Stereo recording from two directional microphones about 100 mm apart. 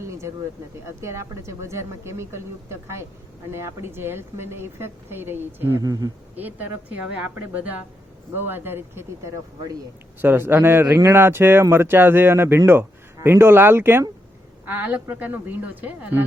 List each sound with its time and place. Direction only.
0.0 s a sound: 30° right (ahead or behind)
1.0 s speech: 30° right (ahead or behind)
5.8 s speech: 40° right (ahead or behind)
6.3 s speech: 15° right (ahead or behind)
10.2 s speech: 20° right (ahead or behind)